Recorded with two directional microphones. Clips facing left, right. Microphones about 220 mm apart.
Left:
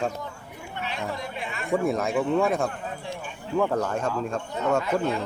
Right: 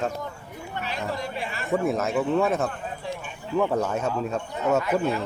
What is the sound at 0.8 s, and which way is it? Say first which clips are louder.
Chatter: right 1 dB; 40° right (ahead or behind).